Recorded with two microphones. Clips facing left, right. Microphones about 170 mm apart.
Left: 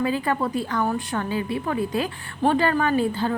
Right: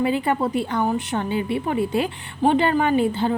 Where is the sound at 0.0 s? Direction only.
25° right (ahead or behind).